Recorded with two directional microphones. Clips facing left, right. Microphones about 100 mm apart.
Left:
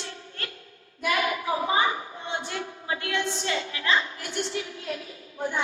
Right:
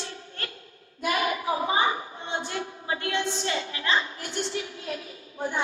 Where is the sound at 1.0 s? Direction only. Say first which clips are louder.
Even; 30° right (ahead or behind).